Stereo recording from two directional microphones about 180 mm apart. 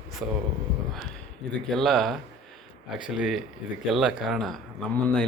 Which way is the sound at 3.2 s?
Centre (ahead or behind).